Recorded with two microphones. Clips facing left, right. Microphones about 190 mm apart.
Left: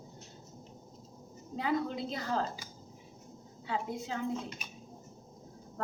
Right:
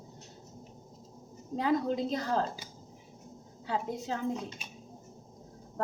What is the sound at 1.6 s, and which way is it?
A woman's voice, 40° right (ahead or behind).